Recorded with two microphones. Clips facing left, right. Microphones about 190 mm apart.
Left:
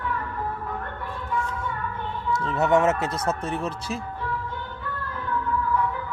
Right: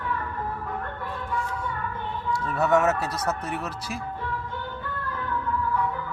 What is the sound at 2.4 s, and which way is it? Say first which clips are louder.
Speech: left 1 dB; 25° left (ahead or behind).